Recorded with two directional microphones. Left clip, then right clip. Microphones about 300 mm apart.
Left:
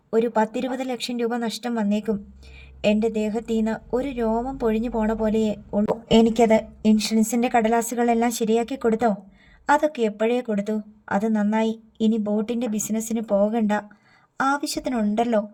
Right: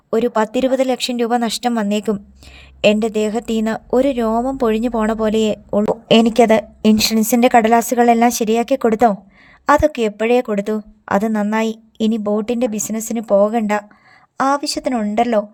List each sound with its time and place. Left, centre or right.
0.1 s a woman's voice: right